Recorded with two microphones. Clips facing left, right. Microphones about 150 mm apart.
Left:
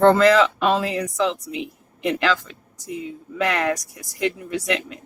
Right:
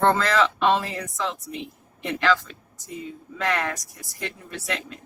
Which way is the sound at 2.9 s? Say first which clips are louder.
Left 5 dB; 75° left (ahead or behind).